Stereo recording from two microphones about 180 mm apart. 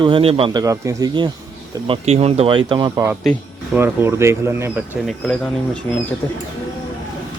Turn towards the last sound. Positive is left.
turn(degrees=10)  # may be behind; listen again after turning